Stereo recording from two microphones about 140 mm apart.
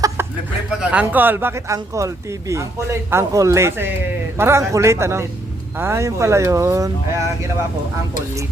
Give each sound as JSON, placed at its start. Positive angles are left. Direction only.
{"t": 0.7, "sound": "speech", "side_deg": -5}